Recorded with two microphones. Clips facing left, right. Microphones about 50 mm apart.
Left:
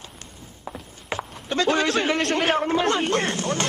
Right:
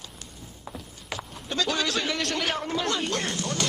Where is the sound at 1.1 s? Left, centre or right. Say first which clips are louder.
Left 6 dB; left.